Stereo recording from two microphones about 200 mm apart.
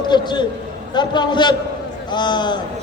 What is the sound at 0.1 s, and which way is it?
A man's voice, 20° left (ahead or behind).